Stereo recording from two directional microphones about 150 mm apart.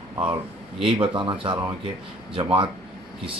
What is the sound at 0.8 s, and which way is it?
Speech, 35° right (ahead or behind).